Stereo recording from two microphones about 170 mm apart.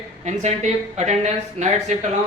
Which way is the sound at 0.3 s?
40° right (ahead or behind).